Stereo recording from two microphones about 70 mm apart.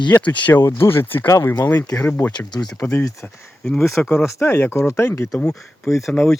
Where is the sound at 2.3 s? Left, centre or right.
Left.